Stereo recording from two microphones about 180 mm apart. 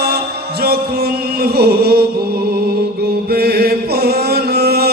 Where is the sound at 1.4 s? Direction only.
60° right (ahead or behind).